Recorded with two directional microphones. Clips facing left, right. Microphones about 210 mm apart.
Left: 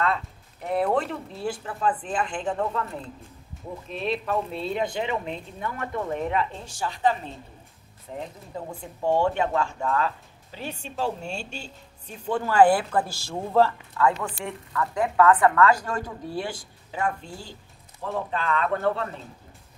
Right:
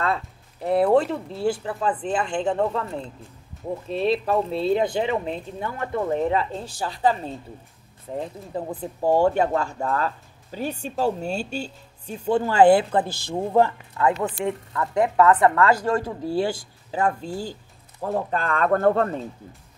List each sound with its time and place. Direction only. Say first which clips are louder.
0.0 s speech: right 1 dB; 35° right (ahead or behind)
3.9 s speech: right 5 dB; 35° right (ahead or behind)
8.5 s speech: right 6 dB; 30° right (ahead or behind)
18.0 s speech: right 3 dB; 45° right (ahead or behind)